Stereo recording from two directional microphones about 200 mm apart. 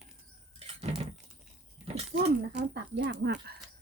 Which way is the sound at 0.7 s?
30° right (ahead or behind).